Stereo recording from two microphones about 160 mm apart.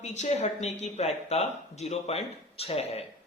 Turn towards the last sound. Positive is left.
turn(degrees=40)  # may be behind; listen again after turning